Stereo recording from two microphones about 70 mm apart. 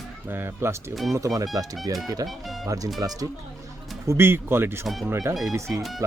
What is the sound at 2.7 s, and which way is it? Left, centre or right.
Speech, right.